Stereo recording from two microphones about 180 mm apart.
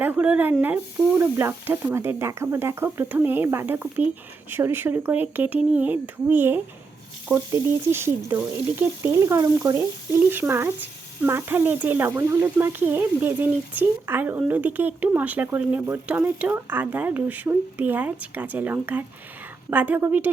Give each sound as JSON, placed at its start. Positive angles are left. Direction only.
{"t": 0.0, "sound": "speech", "side_deg": -10}